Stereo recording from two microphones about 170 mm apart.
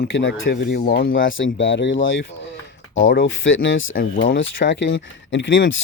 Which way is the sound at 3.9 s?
55° left (ahead or behind).